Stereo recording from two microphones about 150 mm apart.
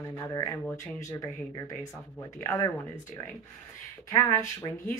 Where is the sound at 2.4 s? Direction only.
15° left (ahead or behind).